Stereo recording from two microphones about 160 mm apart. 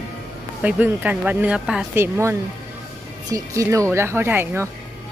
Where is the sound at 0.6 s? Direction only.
10° right (ahead or behind).